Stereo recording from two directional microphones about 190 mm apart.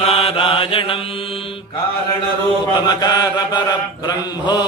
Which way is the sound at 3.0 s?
20° left (ahead or behind).